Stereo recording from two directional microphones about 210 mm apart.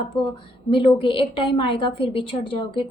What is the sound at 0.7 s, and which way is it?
A woman's voice, 25° left (ahead or behind).